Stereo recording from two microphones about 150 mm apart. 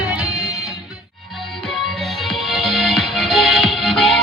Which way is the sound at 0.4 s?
25° left (ahead or behind).